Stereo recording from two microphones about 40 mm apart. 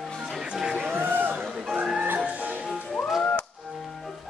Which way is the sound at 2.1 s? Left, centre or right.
Right.